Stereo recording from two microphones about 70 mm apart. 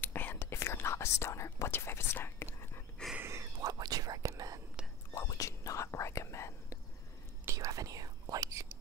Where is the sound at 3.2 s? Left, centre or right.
Right.